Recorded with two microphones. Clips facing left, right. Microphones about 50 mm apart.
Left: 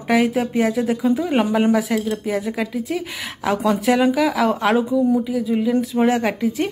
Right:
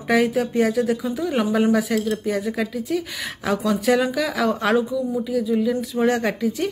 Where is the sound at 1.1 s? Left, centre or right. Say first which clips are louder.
Left 3 dB; left.